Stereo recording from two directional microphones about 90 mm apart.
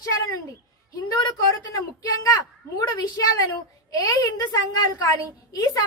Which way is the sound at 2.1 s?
40° left (ahead or behind).